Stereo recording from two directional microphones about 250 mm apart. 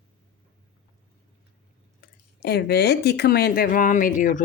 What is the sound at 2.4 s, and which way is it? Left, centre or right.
Speech, left.